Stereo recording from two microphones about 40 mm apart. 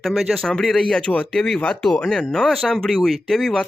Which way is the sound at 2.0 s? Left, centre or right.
Centre.